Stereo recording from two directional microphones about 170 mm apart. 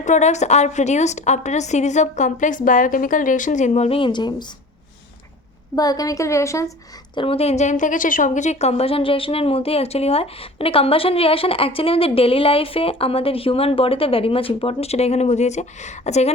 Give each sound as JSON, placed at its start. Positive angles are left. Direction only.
{"t": 0.0, "sound": "a woman's voice", "side_deg": 45}
{"t": 5.7, "sound": "a woman's voice", "side_deg": 20}
{"t": 7.2, "sound": "a woman's voice", "side_deg": 35}